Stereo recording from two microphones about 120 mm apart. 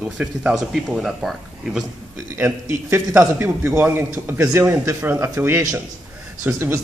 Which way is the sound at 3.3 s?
10° right (ahead or behind).